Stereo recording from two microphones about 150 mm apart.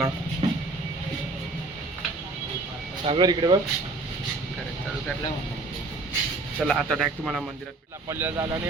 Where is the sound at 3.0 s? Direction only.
30° right (ahead or behind).